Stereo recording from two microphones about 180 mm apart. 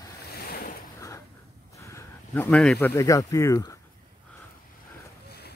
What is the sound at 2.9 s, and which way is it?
Speech, 20° left (ahead or behind).